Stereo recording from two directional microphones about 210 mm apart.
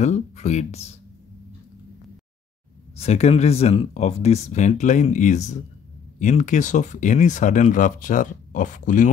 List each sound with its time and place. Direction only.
0.0 s speech: 35° left (ahead or behind)
3.0 s speech: 30° left (ahead or behind)